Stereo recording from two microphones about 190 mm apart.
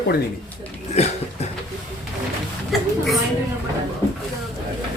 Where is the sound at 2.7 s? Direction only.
Centre (ahead or behind).